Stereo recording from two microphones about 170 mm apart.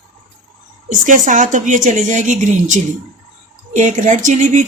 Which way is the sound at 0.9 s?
50° right (ahead or behind).